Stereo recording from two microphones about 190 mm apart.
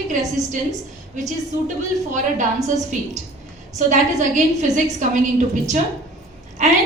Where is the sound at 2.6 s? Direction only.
40° right (ahead or behind).